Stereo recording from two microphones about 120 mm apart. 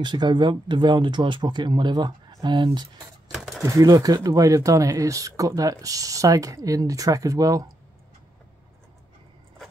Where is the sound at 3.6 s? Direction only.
30° right (ahead or behind).